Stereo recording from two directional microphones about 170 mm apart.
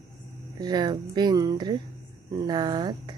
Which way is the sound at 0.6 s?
25° right (ahead or behind).